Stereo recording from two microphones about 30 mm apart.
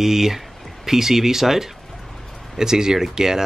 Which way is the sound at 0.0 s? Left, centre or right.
Centre.